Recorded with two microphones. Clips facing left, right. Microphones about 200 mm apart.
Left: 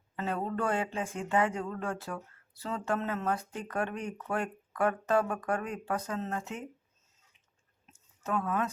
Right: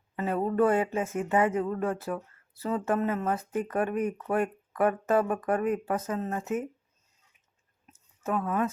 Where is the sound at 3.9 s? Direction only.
50° right (ahead or behind).